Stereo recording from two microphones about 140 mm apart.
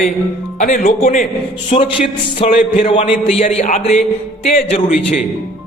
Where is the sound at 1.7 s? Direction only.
50° left (ahead or behind).